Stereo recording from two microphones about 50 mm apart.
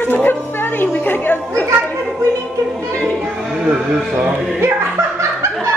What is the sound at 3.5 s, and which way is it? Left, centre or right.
Music, right.